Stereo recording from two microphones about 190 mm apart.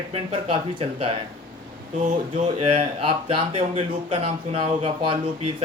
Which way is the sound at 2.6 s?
30° right (ahead or behind).